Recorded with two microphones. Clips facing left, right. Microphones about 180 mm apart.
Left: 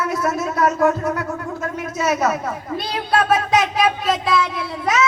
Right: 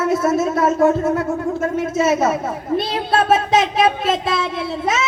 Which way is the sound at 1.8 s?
25° right (ahead or behind).